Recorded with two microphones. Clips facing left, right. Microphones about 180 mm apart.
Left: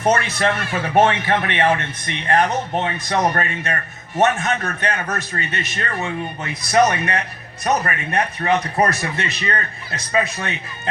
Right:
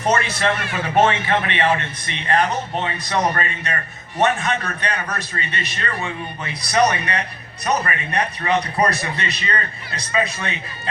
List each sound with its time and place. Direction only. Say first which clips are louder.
0.0 s speech: left 2 dB; 50° left (ahead or behind)